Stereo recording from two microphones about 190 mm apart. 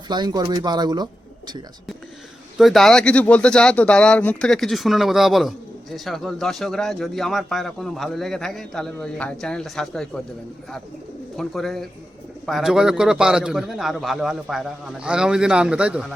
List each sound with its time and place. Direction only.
0.1 s speech: 20° right (ahead or behind)
2.6 s speech: centre (ahead or behind)
11.3 s speech: centre (ahead or behind)